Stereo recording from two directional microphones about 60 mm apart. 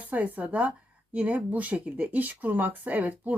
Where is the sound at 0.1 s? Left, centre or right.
Right.